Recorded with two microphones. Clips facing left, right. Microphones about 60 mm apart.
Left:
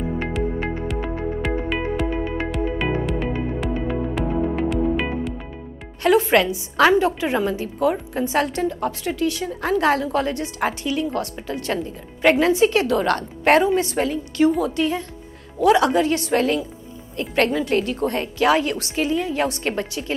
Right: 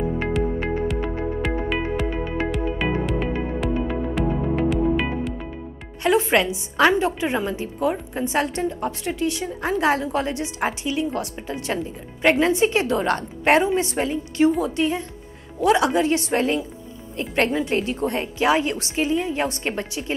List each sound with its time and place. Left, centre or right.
0.2 s music: centre
6.0 s a woman's voice: centre